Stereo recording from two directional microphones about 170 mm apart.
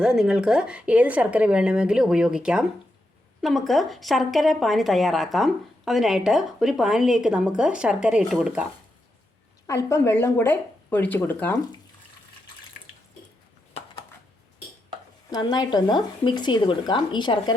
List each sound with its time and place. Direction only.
0.0 s a woman's voice: 5° right (ahead or behind)
9.6 s speech: 20° left (ahead or behind)
15.3 s speech: 25° left (ahead or behind)